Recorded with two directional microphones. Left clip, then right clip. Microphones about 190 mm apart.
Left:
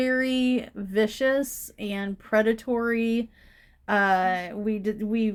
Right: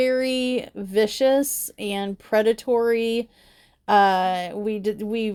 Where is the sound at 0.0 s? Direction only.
25° right (ahead or behind).